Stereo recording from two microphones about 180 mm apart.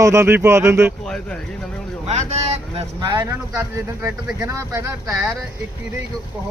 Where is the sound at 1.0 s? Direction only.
Centre (ahead or behind).